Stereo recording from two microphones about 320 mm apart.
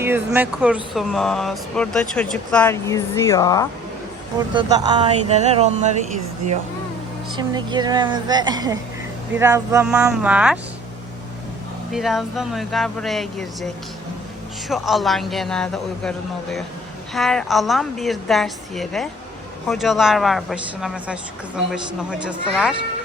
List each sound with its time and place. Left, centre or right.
0.0 s speech: centre
4.5 s speech: centre
7.3 s a woman's voice: centre
11.9 s speech: centre
14.7 s speech: centre